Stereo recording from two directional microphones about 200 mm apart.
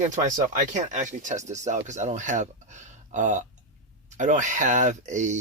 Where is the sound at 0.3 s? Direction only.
40° right (ahead or behind).